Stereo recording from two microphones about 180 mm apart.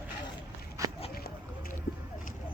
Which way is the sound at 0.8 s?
20° right (ahead or behind).